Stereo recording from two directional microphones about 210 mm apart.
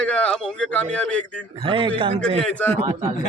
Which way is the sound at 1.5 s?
25° right (ahead or behind).